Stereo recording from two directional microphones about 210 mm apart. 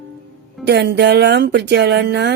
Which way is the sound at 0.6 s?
55° right (ahead or behind).